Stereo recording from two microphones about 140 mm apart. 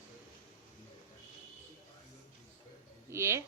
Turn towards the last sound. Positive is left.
turn(degrees=-20)  # may be behind; listen again after turning